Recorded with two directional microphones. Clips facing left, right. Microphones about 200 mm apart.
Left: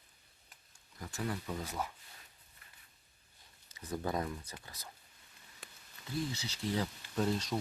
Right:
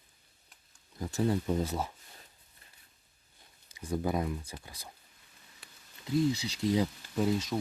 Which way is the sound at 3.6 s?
10° right (ahead or behind).